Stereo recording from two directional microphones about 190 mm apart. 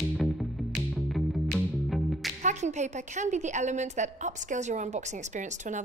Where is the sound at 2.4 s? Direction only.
40° right (ahead or behind).